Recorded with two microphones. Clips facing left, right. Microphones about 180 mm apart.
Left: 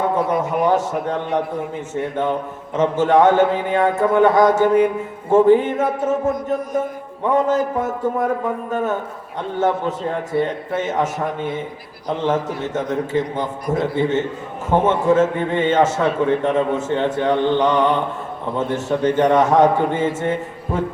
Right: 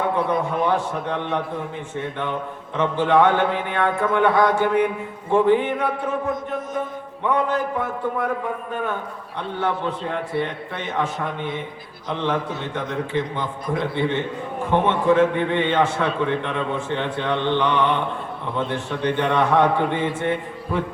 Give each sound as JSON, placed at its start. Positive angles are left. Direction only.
{"t": 0.2, "sound": "a man's voice", "side_deg": 20}
{"t": 0.4, "sound": "a man's voice", "side_deg": 45}
{"t": 2.7, "sound": "a man's voice", "side_deg": 45}
{"t": 7.3, "sound": "a man's voice", "side_deg": 45}